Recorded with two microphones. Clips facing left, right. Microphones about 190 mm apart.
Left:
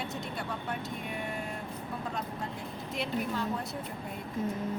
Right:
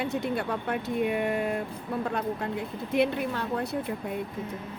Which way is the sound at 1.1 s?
70° right (ahead or behind).